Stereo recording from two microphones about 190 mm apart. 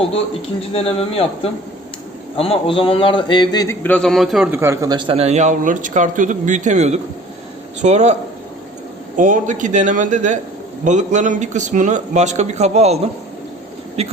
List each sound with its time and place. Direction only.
0.7 s speech: 30° left (ahead or behind)
2.4 s speech: 30° left (ahead or behind); by 4.4 s centre (ahead or behind)
4.5 s speech: 15° right (ahead or behind); by 8.1 s 40° right (ahead or behind)
9.1 s speech: 40° right (ahead or behind)